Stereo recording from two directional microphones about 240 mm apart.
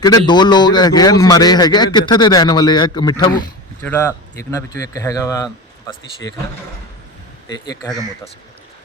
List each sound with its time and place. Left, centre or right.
0.0 s a man's voice: centre
3.8 s a man's voice: centre
7.4 s a man's voice: centre